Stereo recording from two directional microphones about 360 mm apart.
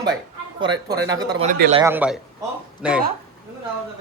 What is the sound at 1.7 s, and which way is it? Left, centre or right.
A man's voice, centre.